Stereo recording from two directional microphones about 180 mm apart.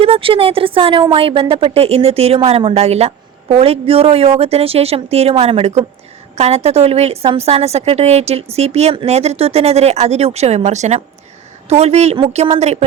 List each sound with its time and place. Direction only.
0.0 s a woman's voice: 30° right (ahead or behind)